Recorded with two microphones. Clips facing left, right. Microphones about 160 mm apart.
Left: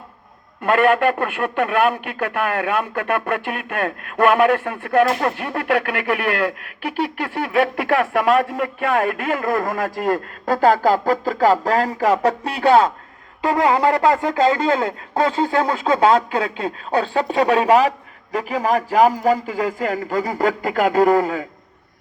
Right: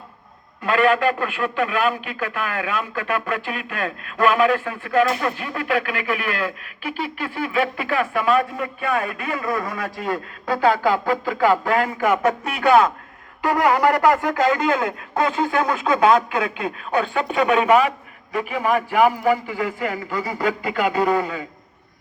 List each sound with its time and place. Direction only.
0.6 s a man's voice: 55° left (ahead or behind)